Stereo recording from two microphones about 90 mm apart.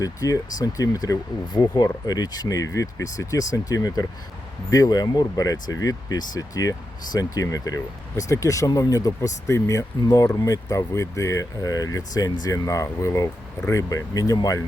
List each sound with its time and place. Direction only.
0.0 s speech: 40° left (ahead or behind)